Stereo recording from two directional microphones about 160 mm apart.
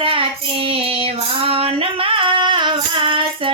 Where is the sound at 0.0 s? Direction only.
35° right (ahead or behind).